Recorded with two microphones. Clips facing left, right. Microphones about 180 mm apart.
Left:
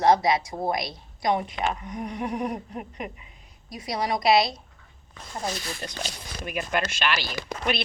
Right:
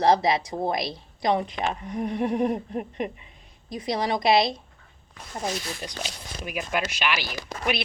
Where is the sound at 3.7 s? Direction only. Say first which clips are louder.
Right 2 dB; 30° right (ahead or behind).